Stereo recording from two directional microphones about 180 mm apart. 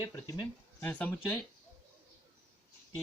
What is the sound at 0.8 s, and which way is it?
Speech, 10° left (ahead or behind).